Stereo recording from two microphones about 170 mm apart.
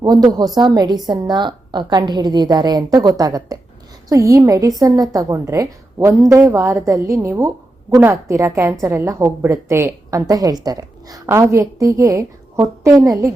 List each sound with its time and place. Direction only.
0.0 s a woman's voice: 25° right (ahead or behind)